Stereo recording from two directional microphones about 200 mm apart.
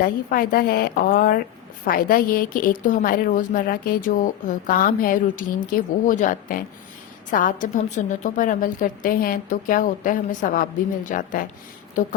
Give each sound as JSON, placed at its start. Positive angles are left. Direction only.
{"t": 0.0, "sound": "a woman's voice", "side_deg": 45}